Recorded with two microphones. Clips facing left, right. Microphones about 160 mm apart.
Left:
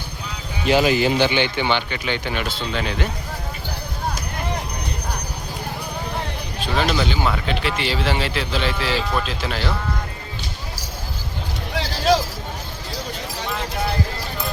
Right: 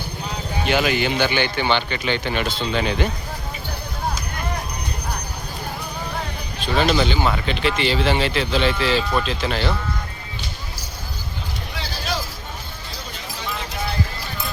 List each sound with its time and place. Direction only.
0.7 s speech: 30° left (ahead or behind)
1.3 s speech: 20° left (ahead or behind); by 3.1 s centre (ahead or behind)
6.7 s speech: 5° left (ahead or behind)
11.8 s a sound: 90° left